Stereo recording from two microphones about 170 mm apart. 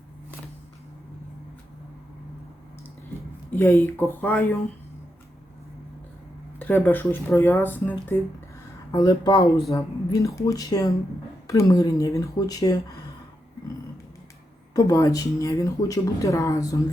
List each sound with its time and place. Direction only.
3.5 s speech: 10° left (ahead or behind)
6.6 s speech: 10° left (ahead or behind)
14.7 s speech: 20° left (ahead or behind)